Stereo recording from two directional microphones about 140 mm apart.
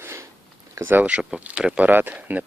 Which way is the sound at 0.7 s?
15° right (ahead or behind).